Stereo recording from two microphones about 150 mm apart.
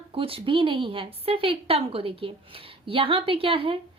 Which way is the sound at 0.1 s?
40° right (ahead or behind).